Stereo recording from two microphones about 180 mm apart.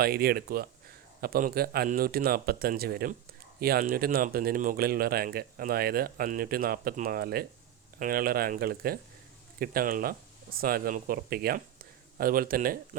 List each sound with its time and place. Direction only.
0.0 s speech: 60° right (ahead or behind)